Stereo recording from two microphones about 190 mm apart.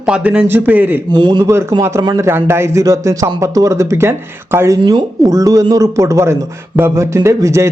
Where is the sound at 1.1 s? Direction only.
25° right (ahead or behind).